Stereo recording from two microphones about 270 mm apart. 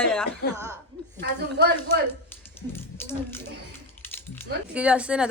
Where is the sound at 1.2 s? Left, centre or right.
Right.